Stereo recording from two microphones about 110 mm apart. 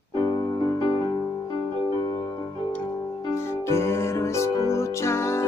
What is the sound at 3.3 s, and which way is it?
Music, 25° left (ahead or behind).